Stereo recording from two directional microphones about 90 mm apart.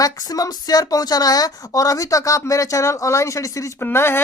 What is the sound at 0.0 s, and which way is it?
Speech, 45° left (ahead or behind).